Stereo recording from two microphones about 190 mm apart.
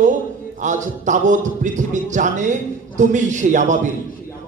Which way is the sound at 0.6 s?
40° right (ahead or behind).